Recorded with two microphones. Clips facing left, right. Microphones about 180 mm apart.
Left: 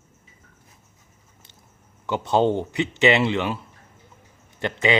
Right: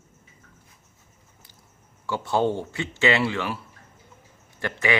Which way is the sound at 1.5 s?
20° left (ahead or behind).